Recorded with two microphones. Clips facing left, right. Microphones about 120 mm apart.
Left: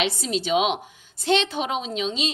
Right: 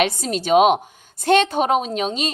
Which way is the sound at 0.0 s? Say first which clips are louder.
Right 4 dB; 50° right (ahead or behind).